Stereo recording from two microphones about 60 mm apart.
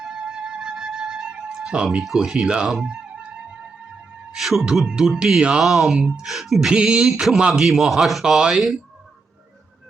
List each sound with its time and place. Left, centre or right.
0.0 s music: centre
2.0 s speech: centre
2.8 s music: centre
4.4 s music: centre
4.7 s a man's voice: centre